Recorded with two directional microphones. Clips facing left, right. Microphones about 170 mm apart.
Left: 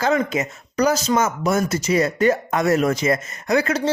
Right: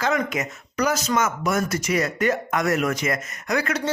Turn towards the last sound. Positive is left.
turn(degrees=30)  # may be behind; listen again after turning